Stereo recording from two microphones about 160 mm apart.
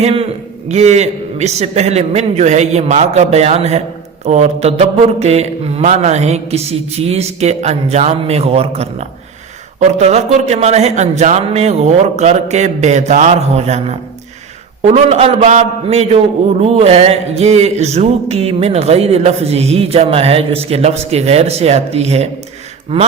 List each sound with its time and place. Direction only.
0.0 s a man's voice: 35° right (ahead or behind)